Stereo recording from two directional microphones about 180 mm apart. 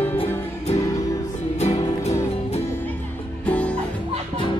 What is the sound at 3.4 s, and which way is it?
Music, 5° left (ahead or behind).